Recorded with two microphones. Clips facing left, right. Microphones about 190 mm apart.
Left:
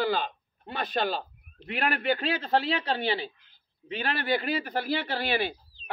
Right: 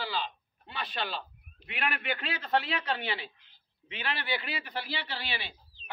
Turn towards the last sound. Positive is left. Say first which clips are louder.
# left 10 dB
turn(degrees=50)  # may be behind; listen again after turning